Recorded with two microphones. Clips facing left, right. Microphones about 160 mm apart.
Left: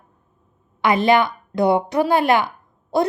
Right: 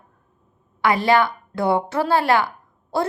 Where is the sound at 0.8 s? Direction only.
20° left (ahead or behind).